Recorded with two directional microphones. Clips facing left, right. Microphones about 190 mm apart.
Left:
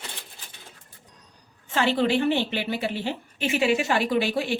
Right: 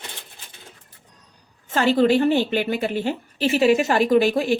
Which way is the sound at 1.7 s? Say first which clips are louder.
Right 5 dB; 40° right (ahead or behind).